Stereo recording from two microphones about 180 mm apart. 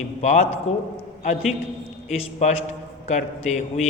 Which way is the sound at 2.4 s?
40° left (ahead or behind).